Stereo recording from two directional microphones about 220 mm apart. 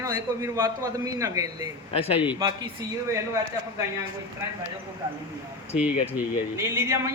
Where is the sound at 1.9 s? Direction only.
25° left (ahead or behind).